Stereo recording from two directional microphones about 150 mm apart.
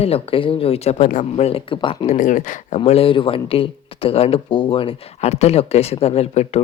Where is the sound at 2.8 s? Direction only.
40° left (ahead or behind).